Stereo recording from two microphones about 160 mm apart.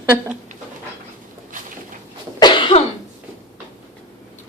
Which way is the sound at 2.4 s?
30° left (ahead or behind).